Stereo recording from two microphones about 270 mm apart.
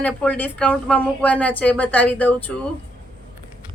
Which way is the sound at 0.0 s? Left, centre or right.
Centre.